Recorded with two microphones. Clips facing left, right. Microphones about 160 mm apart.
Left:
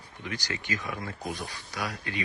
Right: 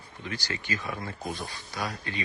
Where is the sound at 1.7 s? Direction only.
35° right (ahead or behind).